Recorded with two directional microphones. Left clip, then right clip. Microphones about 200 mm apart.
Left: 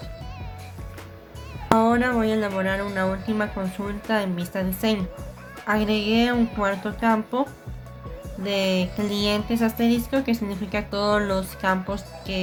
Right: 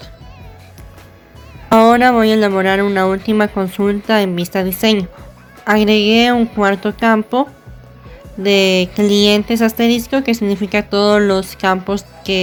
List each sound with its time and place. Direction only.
1.8 s speech: 45° right (ahead or behind)
8.4 s speech: 40° right (ahead or behind)